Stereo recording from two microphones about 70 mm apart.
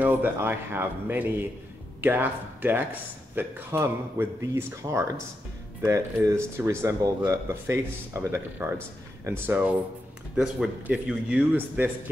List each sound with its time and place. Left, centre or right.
0.0 s speech: right
6.5 s speech: right
9.5 s speech: right
10.3 s speech: centre
11.5 s speech: right